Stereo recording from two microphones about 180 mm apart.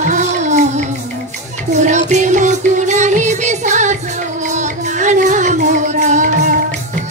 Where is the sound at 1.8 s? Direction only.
40° right (ahead or behind).